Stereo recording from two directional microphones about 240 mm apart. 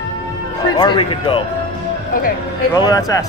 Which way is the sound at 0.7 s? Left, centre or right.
Centre.